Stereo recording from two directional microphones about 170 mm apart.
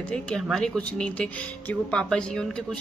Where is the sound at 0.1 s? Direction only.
5° left (ahead or behind).